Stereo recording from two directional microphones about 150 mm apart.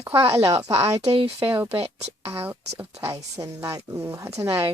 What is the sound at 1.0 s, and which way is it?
Speech, 40° right (ahead or behind).